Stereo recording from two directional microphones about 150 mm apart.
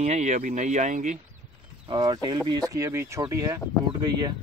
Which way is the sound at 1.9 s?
30° right (ahead or behind).